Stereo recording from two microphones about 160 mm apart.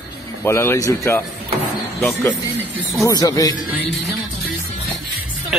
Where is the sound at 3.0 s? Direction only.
20° left (ahead or behind).